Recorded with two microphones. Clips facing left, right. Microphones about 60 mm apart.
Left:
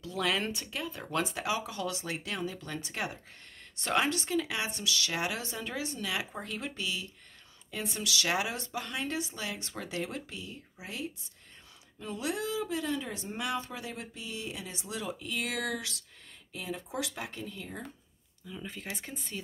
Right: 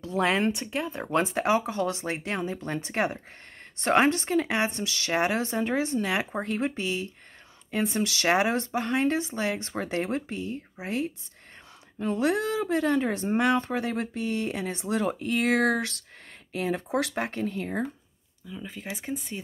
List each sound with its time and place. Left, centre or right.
0.0 s speech: right
18.5 s speech: centre